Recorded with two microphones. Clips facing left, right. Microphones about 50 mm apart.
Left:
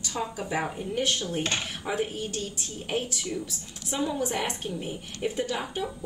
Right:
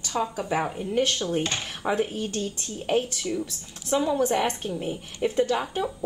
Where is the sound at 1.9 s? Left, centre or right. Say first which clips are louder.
Right 3 dB; centre.